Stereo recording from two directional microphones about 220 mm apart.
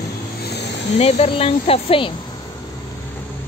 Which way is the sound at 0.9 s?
30° left (ahead or behind).